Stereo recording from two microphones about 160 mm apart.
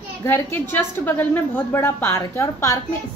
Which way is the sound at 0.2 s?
15° left (ahead or behind).